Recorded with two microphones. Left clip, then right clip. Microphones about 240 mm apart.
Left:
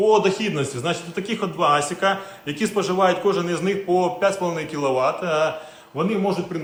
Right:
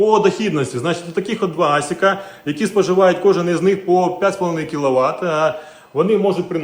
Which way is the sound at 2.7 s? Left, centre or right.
Right.